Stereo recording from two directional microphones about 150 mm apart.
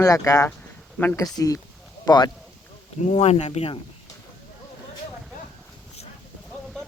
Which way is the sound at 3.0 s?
50° left (ahead or behind).